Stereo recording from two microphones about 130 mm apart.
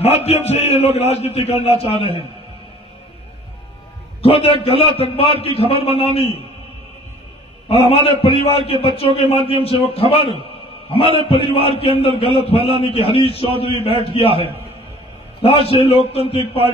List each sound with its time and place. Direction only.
0.0 s a man's voice: 55° left (ahead or behind)
4.2 s a man's voice: 45° left (ahead or behind)
7.9 s a man's voice: 50° left (ahead or behind)